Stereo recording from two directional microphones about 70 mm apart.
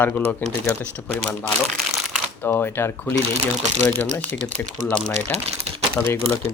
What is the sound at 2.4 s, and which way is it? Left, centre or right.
Speech, left.